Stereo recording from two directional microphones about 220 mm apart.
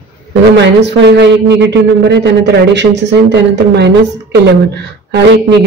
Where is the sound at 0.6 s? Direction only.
55° right (ahead or behind).